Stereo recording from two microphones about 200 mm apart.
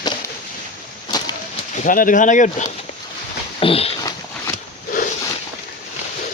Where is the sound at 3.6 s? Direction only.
30° left (ahead or behind).